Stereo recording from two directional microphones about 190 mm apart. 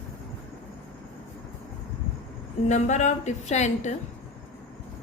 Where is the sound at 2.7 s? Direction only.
40° left (ahead or behind).